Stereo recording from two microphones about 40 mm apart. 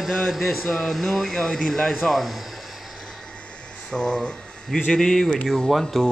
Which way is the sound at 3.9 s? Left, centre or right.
Centre.